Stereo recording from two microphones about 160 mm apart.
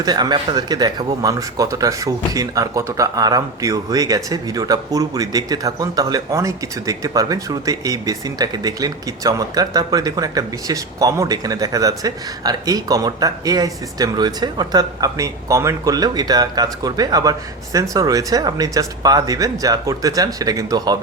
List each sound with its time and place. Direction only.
0.0 s speech: 25° right (ahead or behind)